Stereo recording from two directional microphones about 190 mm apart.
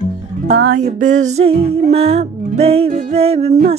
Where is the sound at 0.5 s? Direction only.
55° right (ahead or behind).